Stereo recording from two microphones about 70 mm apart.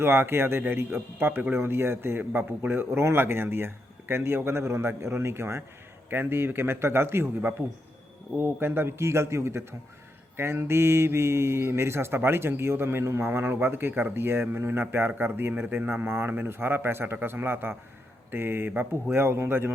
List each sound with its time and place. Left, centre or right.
0.0 s speech: right
18.7 s speech: right
19.1 s speech: right